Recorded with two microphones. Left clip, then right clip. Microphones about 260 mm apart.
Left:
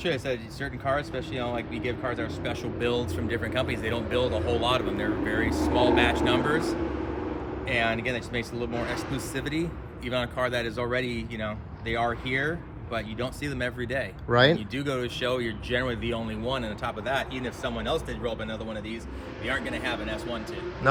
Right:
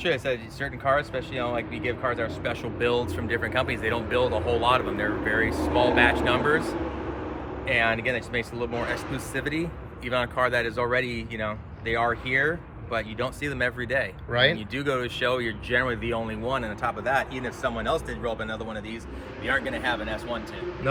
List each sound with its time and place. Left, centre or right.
0.0 s speech: centre
5.5 s speech: right
6.0 s speech: centre
7.7 s speech: centre